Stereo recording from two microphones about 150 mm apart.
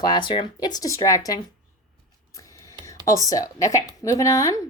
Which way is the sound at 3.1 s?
25° left (ahead or behind).